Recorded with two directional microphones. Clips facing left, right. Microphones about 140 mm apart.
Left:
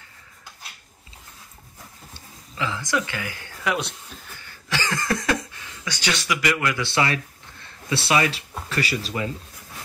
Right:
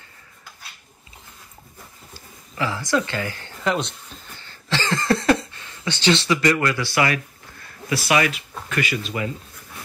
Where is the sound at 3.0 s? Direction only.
15° left (ahead or behind).